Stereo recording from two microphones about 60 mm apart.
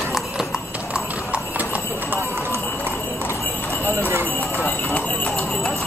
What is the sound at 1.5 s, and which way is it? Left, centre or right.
Clip-clop, right.